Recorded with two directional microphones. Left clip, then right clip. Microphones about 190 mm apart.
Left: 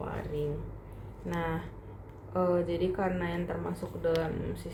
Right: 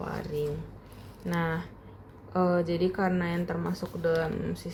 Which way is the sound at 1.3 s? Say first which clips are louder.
Right 3 dB; 45° right (ahead or behind).